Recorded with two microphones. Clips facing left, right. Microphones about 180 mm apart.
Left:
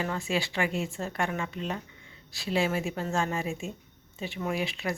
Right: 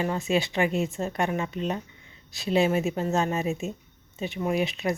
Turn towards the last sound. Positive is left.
turn(degrees=-20)  # may be behind; listen again after turning